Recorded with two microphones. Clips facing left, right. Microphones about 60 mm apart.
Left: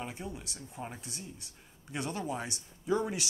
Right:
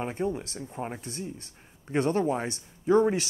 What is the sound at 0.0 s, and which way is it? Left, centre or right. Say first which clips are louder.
Speech: right 11 dB; right.